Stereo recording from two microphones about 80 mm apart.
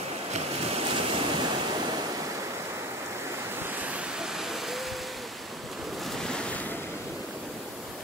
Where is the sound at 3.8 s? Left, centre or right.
Centre.